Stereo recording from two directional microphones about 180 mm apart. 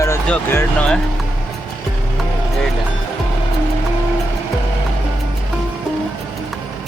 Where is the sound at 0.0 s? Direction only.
15° left (ahead or behind).